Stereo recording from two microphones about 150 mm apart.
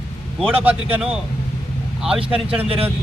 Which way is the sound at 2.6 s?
40° right (ahead or behind).